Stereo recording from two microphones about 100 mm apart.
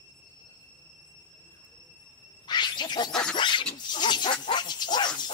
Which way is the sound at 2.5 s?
45° left (ahead or behind).